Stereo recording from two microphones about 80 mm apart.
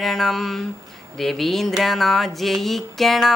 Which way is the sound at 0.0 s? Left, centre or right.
Centre.